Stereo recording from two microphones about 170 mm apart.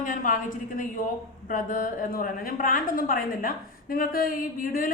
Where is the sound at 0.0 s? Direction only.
50° left (ahead or behind).